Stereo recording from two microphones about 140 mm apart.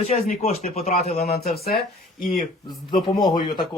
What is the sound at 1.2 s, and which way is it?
Speech, 90° left.